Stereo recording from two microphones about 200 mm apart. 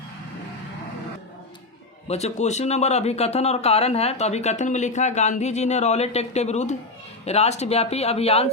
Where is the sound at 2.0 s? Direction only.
35° left (ahead or behind).